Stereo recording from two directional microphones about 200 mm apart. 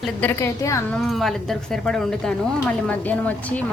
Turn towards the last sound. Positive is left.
turn(degrees=5)  # may be behind; listen again after turning